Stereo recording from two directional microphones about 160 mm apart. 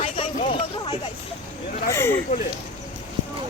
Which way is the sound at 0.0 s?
35° left (ahead or behind).